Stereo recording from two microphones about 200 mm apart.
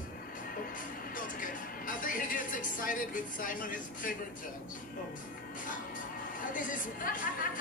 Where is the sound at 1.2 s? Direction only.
40° left (ahead or behind).